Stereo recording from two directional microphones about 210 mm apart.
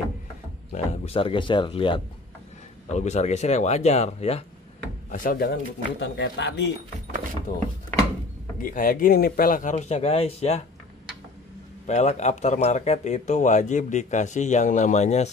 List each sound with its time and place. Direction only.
1.0 s speech: 25° left (ahead or behind)
5.1 s speech: 40° left (ahead or behind)
7.5 s speech: 35° left (ahead or behind)
11.9 s speech: 30° left (ahead or behind)